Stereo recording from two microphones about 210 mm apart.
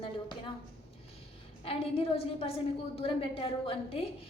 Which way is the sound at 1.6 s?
30° left (ahead or behind).